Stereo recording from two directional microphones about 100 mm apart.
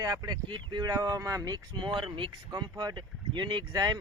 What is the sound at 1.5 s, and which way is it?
Speech, 50° right (ahead or behind).